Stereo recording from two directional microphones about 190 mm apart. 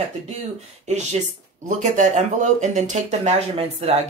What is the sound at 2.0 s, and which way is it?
Speech, 40° right (ahead or behind).